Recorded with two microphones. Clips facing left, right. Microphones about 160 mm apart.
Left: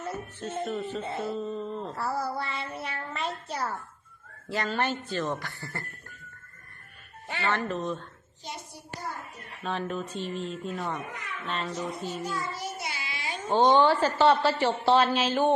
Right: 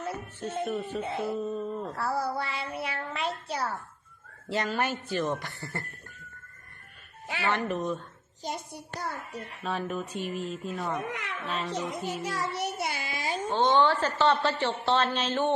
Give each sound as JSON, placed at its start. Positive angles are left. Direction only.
{"t": 0.3, "sound": "a woman's voice", "side_deg": -10}
{"t": 1.1, "sound": "child singing", "side_deg": -5}
{"t": 4.4, "sound": "speech", "side_deg": -25}
{"t": 4.7, "sound": "a woman's voice", "side_deg": -10}
{"t": 7.3, "sound": "speech", "side_deg": -10}
{"t": 8.4, "sound": "hands", "side_deg": -50}
{"t": 9.0, "sound": "a child's voice", "side_deg": -80}
{"t": 9.6, "sound": "speech", "side_deg": -5}
{"t": 11.1, "sound": "a child's voice", "side_deg": -80}
{"t": 11.4, "sound": "speech", "side_deg": -5}
{"t": 11.7, "sound": "a child's voice", "side_deg": -90}
{"t": 12.2, "sound": "child singing", "side_deg": -90}
{"t": 13.5, "sound": "a woman's voice", "side_deg": 20}